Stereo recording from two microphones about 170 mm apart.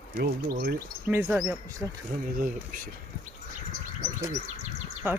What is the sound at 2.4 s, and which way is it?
Speech, 55° right (ahead or behind).